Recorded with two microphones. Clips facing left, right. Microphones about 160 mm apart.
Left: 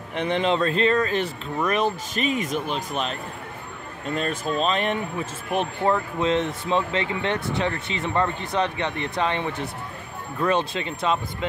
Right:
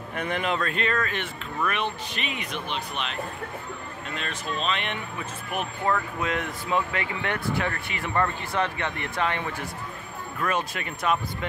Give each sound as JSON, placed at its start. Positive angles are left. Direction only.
{"t": 0.1, "sound": "speech", "side_deg": 25}